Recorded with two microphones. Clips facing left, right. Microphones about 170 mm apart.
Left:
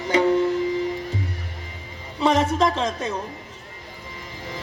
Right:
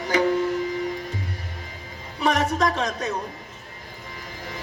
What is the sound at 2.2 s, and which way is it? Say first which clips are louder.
Speech: left 3 dB; 25° left (ahead or behind).